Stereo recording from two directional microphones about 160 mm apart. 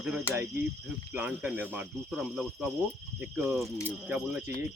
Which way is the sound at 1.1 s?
10° right (ahead or behind).